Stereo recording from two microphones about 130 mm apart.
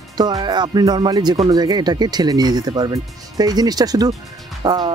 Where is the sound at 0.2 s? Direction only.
30° right (ahead or behind).